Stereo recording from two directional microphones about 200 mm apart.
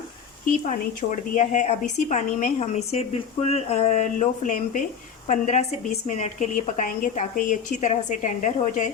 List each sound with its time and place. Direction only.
1.1 s a woman's voice: 40° left (ahead or behind)